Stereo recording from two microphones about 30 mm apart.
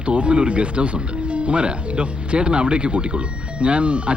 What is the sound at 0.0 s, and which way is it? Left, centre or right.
Speech, right.